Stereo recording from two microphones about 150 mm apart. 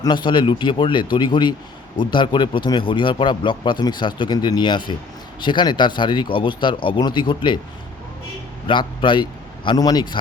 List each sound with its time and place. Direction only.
0.0 s speech: 30° left (ahead or behind)
8.6 s a man's voice: 35° left (ahead or behind)